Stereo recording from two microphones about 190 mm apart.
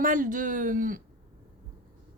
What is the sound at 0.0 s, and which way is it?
A woman's voice, 45° right (ahead or behind).